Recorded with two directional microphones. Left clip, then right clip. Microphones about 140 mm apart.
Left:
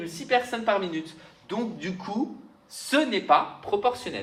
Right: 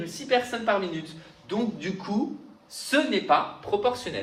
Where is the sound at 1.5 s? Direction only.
90° left.